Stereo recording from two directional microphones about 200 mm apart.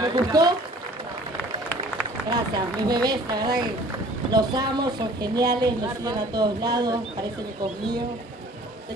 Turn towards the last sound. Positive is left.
turn(degrees=-20)  # may be behind; listen again after turning